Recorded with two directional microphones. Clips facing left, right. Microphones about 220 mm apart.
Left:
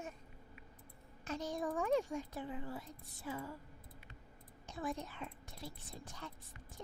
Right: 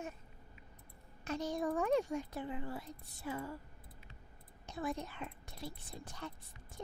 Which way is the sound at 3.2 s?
60° right (ahead or behind).